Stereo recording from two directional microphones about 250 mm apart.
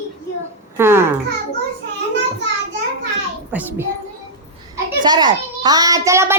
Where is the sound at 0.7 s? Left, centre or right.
Centre.